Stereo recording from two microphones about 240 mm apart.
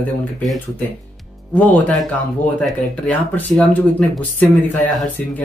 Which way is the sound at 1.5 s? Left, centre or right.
Centre.